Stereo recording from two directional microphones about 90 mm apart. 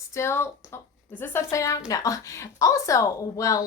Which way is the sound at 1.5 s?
35° left (ahead or behind).